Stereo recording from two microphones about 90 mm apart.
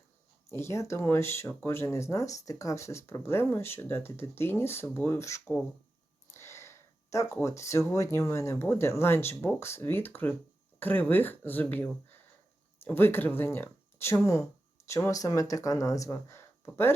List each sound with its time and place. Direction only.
0.5 s speech: 30° left (ahead or behind)
6.3 s a sound: 30° left (ahead or behind)
7.4 s speech: 35° left (ahead or behind)
16.1 s speech: 30° left (ahead or behind)